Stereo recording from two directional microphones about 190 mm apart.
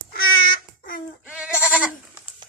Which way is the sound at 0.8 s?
50° left (ahead or behind).